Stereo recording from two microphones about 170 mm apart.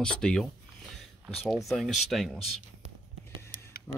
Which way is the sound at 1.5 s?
Centre (ahead or behind).